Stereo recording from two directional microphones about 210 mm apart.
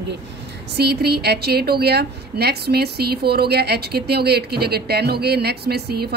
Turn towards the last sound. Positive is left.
turn(degrees=-50)  # may be behind; listen again after turning